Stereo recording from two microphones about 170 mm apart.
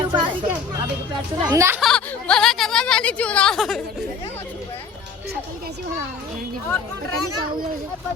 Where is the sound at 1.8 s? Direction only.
5° left (ahead or behind).